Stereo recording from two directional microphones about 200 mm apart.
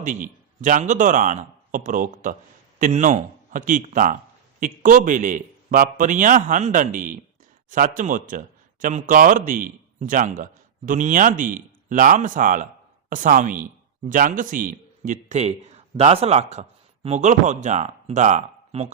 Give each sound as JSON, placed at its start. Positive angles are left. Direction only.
{"t": 0.0, "sound": "speech", "side_deg": -40}